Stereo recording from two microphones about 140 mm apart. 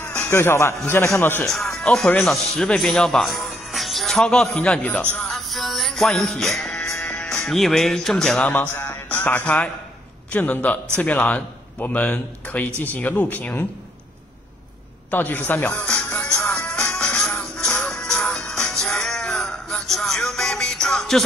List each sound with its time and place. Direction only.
0.0 s music: 15° left (ahead or behind)
0.8 s a man's voice: 20° left (ahead or behind)
1.8 s speech: 5° left (ahead or behind)
5.2 s music: centre (ahead or behind)
7.4 s speech: centre (ahead or behind)
8.5 s a man's voice: 15° left (ahead or behind)
15.0 s music: 15° left (ahead or behind)
17.7 s music: 5° left (ahead or behind)